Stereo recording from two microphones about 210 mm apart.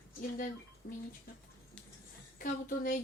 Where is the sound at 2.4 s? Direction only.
40° left (ahead or behind).